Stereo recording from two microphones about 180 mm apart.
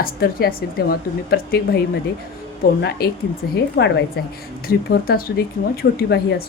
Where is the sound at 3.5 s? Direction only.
75° left (ahead or behind).